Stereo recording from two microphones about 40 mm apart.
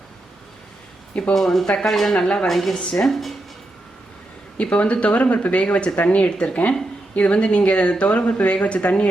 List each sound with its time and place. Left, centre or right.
1.3 s speech: centre
1.9 s speech: centre
2.7 s speech: centre
3.1 s speech: centre
4.5 s speech: left